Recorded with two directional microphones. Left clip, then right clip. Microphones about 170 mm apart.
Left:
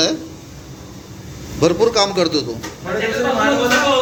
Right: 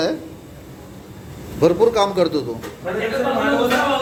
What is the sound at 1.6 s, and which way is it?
Speech, 15° right (ahead or behind).